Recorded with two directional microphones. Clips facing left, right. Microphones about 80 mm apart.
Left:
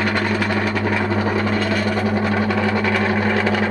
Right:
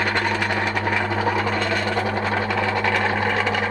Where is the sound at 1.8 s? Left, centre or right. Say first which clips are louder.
Left 3 dB; centre.